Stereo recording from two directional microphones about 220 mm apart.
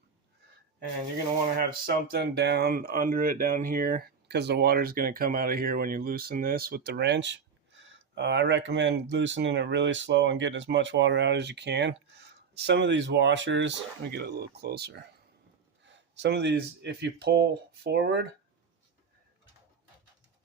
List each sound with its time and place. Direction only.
2.0 s speech: 45° right (ahead or behind)